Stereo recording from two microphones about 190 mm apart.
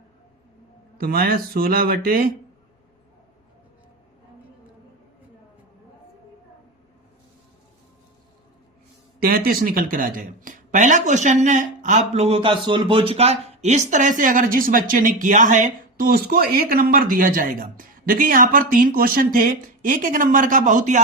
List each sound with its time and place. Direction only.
0.9 s speech: 50° right (ahead or behind)
9.2 s speech: 50° right (ahead or behind)